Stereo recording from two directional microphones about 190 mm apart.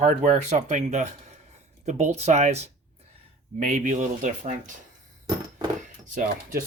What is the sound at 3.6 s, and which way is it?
Speech, 40° right (ahead or behind).